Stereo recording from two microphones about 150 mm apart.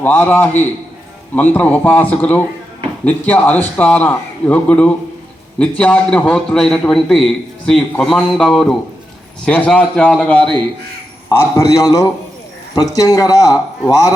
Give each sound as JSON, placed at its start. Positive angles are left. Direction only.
{"t": 0.0, "sound": "a man's voice", "side_deg": 10}
{"t": 11.3, "sound": "a man's voice", "side_deg": 20}